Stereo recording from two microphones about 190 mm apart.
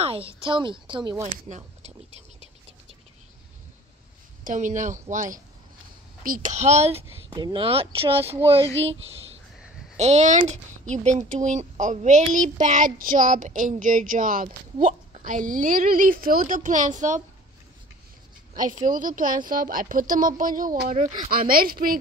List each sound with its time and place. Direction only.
0.0 s a woman's voice: 30° right (ahead or behind)
4.5 s a woman's voice: 40° right (ahead or behind)
9.9 s a woman's voice: 35° right (ahead or behind)
18.5 s a woman's voice: 45° right (ahead or behind)